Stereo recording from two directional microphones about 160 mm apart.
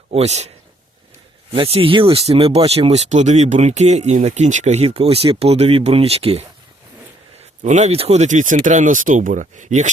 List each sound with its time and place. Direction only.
0.1 s speech: 40° right (ahead or behind)
1.7 s speech: 35° right (ahead or behind)
7.6 s speech: 45° right (ahead or behind)